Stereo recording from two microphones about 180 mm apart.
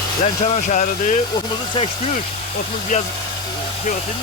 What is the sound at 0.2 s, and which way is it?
Speech, 40° left (ahead or behind).